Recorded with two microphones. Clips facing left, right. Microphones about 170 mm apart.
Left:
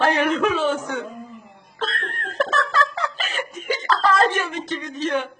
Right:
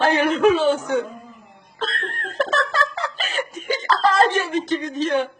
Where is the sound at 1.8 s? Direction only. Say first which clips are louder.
Even; 30° right (ahead or behind).